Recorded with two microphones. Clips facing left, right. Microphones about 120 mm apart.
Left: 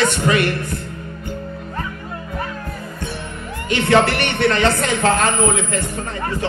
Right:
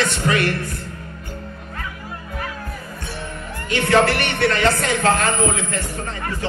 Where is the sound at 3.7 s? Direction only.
20° left (ahead or behind).